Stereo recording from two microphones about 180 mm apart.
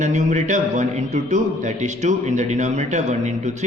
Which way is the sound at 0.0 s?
40° right (ahead or behind).